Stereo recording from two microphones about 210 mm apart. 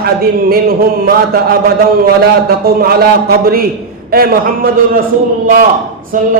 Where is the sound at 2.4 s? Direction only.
45° right (ahead or behind).